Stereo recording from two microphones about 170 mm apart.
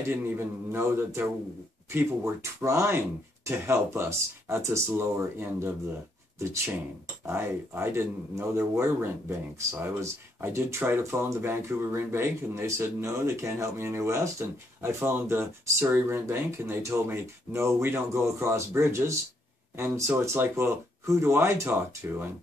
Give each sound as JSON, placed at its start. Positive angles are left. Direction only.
{"t": 0.1, "sound": "speech", "side_deg": -15}